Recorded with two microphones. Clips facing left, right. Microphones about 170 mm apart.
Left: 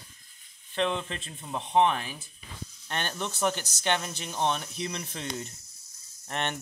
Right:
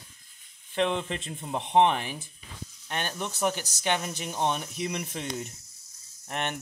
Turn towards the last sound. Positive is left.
turn(degrees=-10)  # may be behind; listen again after turning